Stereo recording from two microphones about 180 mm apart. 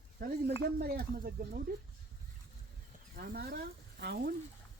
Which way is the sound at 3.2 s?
60° right (ahead or behind).